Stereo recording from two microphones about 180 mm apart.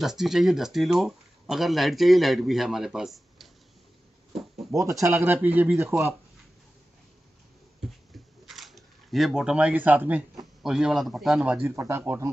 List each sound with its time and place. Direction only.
0.0 s speech: centre (ahead or behind)
4.6 s speech: 15° right (ahead or behind)
8.5 s speech: centre (ahead or behind)